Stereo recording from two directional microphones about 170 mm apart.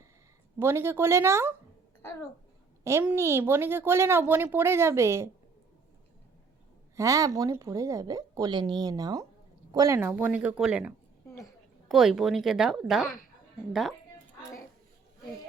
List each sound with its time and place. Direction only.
0.6 s a woman's voice: 15° right (ahead or behind)
2.8 s a woman's voice: 10° right (ahead or behind)
6.9 s a woman's voice: 20° right (ahead or behind); by 13.1 s 5° right (ahead or behind)